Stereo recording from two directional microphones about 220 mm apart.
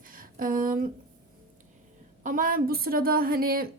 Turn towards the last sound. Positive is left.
turn(degrees=-40)  # may be behind; listen again after turning